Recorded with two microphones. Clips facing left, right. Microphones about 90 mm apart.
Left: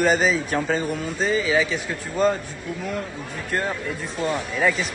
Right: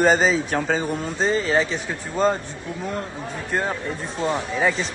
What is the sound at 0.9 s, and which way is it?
Speech, 35° right (ahead or behind).